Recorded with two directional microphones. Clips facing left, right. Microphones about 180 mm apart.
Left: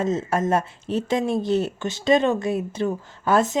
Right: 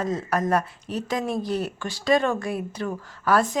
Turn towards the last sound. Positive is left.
turn(degrees=25)  # may be behind; listen again after turning